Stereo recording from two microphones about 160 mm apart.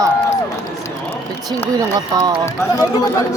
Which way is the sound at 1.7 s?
25° right (ahead or behind).